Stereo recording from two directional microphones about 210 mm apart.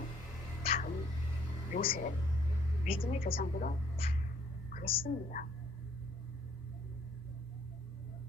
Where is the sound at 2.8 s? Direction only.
30° left (ahead or behind).